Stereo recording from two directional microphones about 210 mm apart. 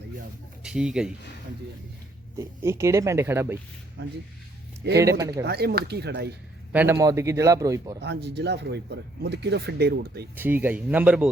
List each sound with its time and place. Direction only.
0.6 s speech: 5° right (ahead or behind)
2.4 s speech: 15° right (ahead or behind)
4.0 s speech: 55° right (ahead or behind)
6.7 s speech: 10° right (ahead or behind)
8.0 s speech: 55° right (ahead or behind)
10.3 s speech: 10° right (ahead or behind)